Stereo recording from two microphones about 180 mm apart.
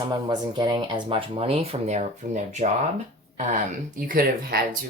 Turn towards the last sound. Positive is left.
turn(degrees=-55)  # may be behind; listen again after turning